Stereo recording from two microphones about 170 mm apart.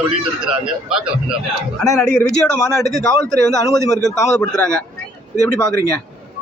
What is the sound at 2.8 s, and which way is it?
Speech, centre (ahead or behind).